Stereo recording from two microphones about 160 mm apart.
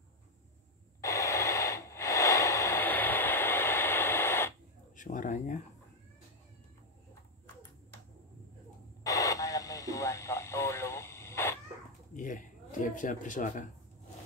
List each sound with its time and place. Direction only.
1.0 s radio: 20° left (ahead or behind)
4.9 s speech: 55° left (ahead or behind)
9.0 s radio: 20° left (ahead or behind)
12.1 s speech: 55° left (ahead or behind)